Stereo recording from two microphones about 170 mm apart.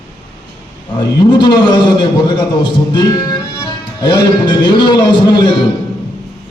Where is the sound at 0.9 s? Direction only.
25° left (ahead or behind).